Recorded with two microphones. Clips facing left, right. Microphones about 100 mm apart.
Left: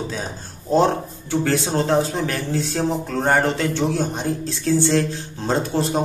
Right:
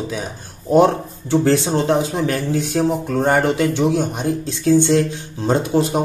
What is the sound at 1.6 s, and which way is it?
Speech, 20° right (ahead or behind).